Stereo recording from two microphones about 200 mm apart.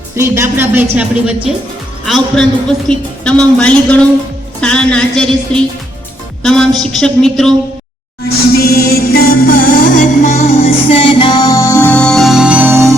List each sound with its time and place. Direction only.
0.2 s a woman's voice: 15° right (ahead or behind); by 7.5 s 5° left (ahead or behind)
8.5 s music: 50° left (ahead or behind); by 12.9 s 10° right (ahead or behind)